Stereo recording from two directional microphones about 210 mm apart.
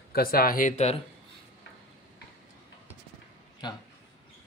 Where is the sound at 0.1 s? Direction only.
45° left (ahead or behind).